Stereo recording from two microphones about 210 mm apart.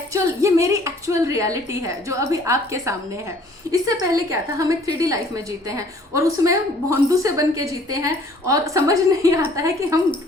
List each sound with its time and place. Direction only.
0.1 s a woman's voice: 15° right (ahead or behind)